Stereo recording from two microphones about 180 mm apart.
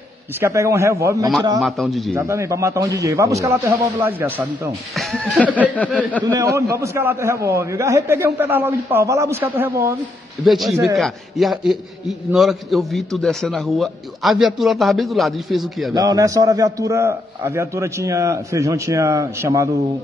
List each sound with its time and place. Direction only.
0.4 s a man's voice: 15° right (ahead or behind)
1.6 s a man's voice: centre (ahead or behind)
2.1 s a man's voice: 15° right (ahead or behind)
4.9 s a man's voice: centre (ahead or behind)
6.2 s a man's voice: 15° right (ahead or behind)
10.4 s a man's voice: centre (ahead or behind)
15.9 s a man's voice: 20° right (ahead or behind)